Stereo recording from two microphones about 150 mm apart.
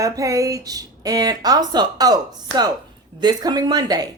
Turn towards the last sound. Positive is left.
turn(degrees=-25)  # may be behind; listen again after turning